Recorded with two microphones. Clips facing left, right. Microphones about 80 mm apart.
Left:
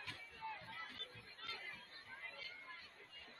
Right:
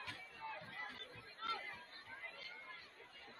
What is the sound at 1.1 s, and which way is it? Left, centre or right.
Chatter, right.